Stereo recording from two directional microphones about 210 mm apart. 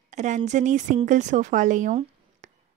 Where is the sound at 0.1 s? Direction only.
35° right (ahead or behind).